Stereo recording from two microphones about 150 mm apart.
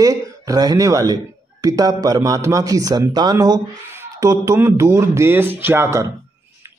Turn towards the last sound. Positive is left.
turn(degrees=-20)  # may be behind; listen again after turning